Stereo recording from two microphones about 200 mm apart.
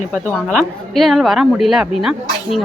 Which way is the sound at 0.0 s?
40° left (ahead or behind).